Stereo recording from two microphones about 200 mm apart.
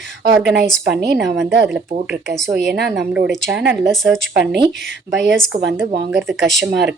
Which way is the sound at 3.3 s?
Centre (ahead or behind).